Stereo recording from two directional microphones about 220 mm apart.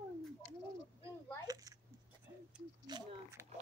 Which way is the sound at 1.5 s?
15° right (ahead or behind).